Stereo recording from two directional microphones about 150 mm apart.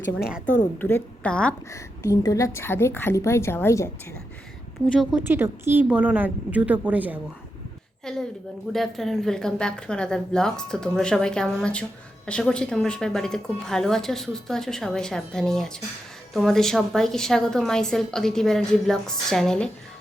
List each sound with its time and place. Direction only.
0.2 s a woman's voice: 5° right (ahead or behind)
0.8 s a woman's voice: 15° left (ahead or behind)
1.7 s a woman's voice: 20° left (ahead or behind)
5.3 s a woman's voice: 15° right (ahead or behind)
8.1 s a woman's voice: 5° left (ahead or behind)